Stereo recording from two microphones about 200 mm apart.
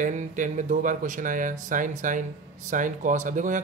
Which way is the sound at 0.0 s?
40° right (ahead or behind).